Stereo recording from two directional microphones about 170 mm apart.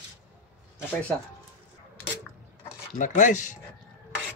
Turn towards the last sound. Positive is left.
turn(degrees=50)  # may be behind; listen again after turning